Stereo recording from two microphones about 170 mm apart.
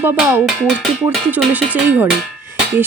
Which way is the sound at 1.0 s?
10° right (ahead or behind).